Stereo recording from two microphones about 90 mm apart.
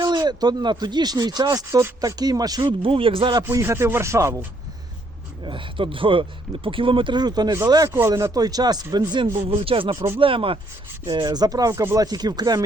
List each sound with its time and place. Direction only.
0.0 s speech: 55° right (ahead or behind)
2.8 s speech: 80° right
3.5 s speech: 30° right (ahead or behind)
5.4 s speech: 65° right (ahead or behind); by 7.6 s 50° right (ahead or behind)
7.9 s speech: 30° right (ahead or behind); by 9.2 s 50° right (ahead or behind)
9.2 s speech: 90° right
11.1 s speech: 50° right (ahead or behind)
11.7 s speech: 35° right (ahead or behind)
12.0 s speech: 50° right (ahead or behind)